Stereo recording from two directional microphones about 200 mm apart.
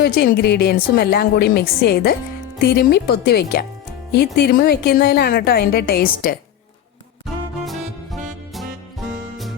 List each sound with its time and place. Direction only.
0.0 s a woman's voice: 50° left (ahead or behind)
7.6 s music: centre (ahead or behind)